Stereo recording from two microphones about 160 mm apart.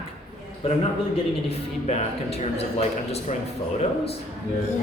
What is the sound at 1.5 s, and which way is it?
A man's voice, 40° left (ahead or behind).